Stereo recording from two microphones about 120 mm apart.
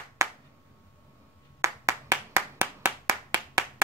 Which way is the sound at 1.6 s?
25° right (ahead or behind).